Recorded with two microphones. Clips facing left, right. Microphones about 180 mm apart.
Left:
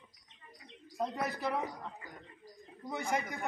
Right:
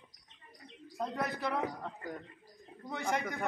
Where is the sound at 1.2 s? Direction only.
5° left (ahead or behind).